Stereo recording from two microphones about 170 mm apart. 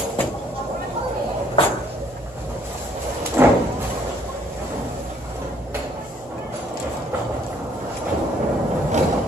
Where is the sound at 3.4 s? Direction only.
15° right (ahead or behind).